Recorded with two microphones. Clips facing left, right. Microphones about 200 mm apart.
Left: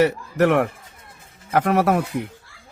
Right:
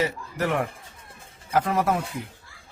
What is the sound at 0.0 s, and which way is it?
Speech, 70° left (ahead or behind).